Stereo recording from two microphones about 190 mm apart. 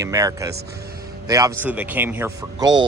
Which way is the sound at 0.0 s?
20° right (ahead or behind).